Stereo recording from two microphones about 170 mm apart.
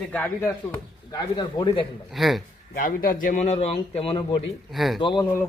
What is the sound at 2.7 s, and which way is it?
A man's voice, 55° left (ahead or behind).